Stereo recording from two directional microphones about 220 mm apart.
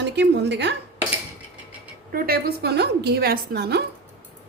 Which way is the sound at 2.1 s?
40° right (ahead or behind).